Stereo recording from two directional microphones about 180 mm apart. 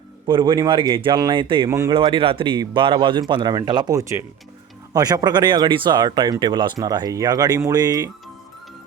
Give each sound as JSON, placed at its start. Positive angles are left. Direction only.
{"t": 0.3, "sound": "speech", "side_deg": -25}